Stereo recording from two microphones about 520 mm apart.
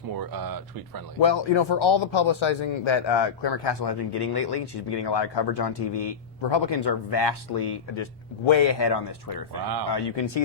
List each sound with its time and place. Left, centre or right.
0.2 s speech: right
1.2 s a man's voice: left